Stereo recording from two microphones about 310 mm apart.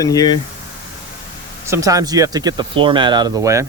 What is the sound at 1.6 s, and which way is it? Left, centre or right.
Speech, centre.